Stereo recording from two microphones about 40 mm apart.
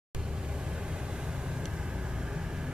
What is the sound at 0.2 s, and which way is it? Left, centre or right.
Vehicle, right.